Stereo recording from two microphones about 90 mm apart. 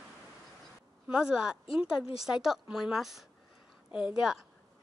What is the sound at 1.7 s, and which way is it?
Speech, 90° left.